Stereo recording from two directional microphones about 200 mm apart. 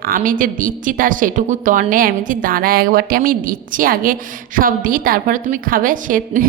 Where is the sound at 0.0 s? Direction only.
45° right (ahead or behind).